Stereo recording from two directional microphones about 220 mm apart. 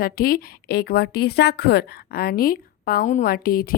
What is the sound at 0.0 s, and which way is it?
A woman's voice, 40° left (ahead or behind).